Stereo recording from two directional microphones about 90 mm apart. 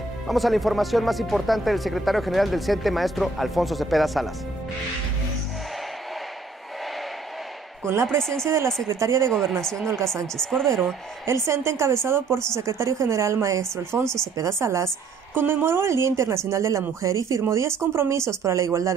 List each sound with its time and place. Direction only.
0.3 s speech: centre (ahead or behind)
7.8 s a woman's voice: 30° right (ahead or behind)
8.2 s speech: 5° left (ahead or behind)
8.5 s speech: 30° right (ahead or behind)
9.3 s speech: 5° left (ahead or behind)
11.2 s speech: 30° right (ahead or behind)
14.0 s speech: 5° left (ahead or behind)
14.3 s a woman's voice: 35° right (ahead or behind)